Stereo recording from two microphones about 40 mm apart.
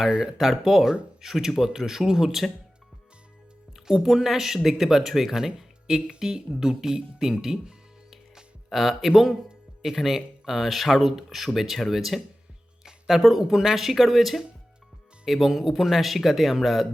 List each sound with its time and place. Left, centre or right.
0.1 s speech: right
0.3 s speech: centre
3.8 s speech: centre
8.1 s music: centre
9.8 s speech: centre